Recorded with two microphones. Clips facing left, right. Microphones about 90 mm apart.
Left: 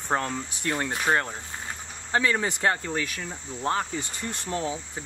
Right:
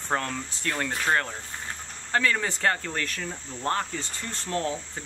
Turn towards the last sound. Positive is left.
turn(degrees=5)  # may be behind; listen again after turning